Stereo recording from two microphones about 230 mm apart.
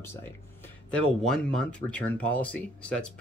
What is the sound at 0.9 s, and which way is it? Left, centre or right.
Speech, centre.